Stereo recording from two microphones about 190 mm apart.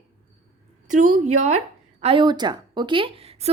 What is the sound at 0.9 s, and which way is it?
Speech, 40° right (ahead or behind).